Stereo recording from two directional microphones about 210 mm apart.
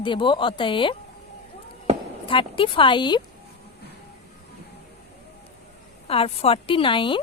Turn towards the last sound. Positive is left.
turn(degrees=25)  # may be behind; listen again after turning